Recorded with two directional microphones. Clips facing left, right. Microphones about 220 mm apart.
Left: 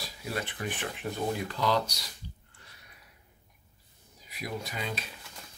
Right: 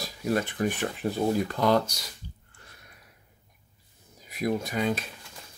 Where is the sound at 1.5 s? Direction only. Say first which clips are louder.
Right 4 dB; 50° right (ahead or behind).